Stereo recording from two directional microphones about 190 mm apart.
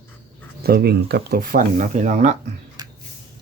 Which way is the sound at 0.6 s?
55° right (ahead or behind).